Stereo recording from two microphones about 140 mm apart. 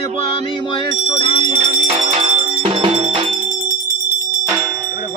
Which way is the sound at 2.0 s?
40° right (ahead or behind).